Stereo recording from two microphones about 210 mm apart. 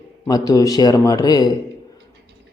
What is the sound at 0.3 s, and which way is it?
A man's voice, 15° left (ahead or behind).